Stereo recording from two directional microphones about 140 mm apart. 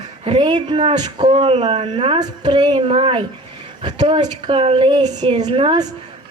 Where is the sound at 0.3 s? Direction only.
35° right (ahead or behind).